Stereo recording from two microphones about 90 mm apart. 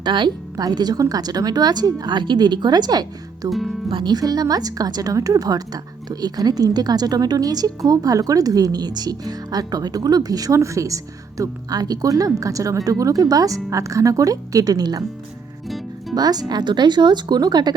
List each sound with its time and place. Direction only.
0.0 s speech: 55° right (ahead or behind)
3.5 s speech: centre (ahead or behind)
3.8 s speech: 65° right (ahead or behind); by 15.0 s 45° right (ahead or behind)
15.6 s music: centre (ahead or behind)
16.1 s speech: 45° right (ahead or behind)